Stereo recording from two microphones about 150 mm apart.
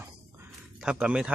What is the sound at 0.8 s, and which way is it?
Speech, 5° right (ahead or behind).